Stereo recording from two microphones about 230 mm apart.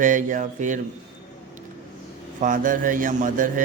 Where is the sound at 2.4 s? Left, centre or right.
Right.